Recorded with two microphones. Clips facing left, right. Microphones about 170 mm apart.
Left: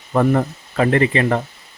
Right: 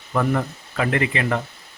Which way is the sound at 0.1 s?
40° left (ahead or behind).